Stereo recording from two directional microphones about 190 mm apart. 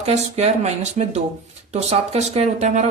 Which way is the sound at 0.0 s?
35° right (ahead or behind).